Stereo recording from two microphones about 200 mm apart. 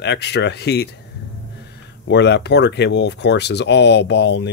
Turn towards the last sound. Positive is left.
turn(degrees=60)  # may be behind; listen again after turning